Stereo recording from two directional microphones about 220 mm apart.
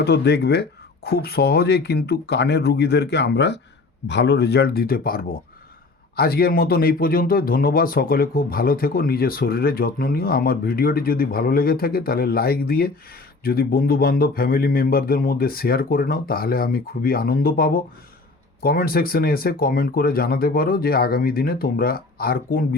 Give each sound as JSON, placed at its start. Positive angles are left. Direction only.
{"t": 0.0, "sound": "speech", "side_deg": 50}